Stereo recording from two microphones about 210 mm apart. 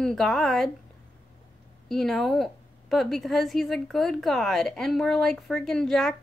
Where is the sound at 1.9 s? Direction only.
Centre (ahead or behind).